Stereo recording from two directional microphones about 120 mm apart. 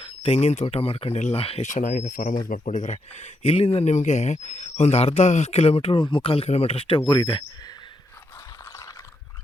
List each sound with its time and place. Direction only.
0.0 s speech: 55° left (ahead or behind)
1.6 s speech: 90° left; by 7.0 s 50° left (ahead or behind)
7.1 s cricket: 40° left (ahead or behind)